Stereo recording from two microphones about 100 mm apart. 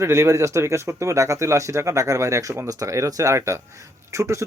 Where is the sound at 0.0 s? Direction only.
25° right (ahead or behind).